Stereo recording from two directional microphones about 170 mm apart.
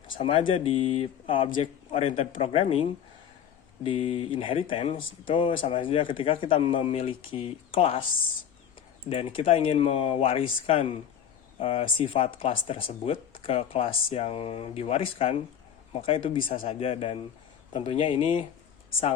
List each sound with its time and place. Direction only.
0.2 s speech: 30° left (ahead or behind)
3.8 s speech: 30° left (ahead or behind)
9.0 s speech: 35° left (ahead or behind)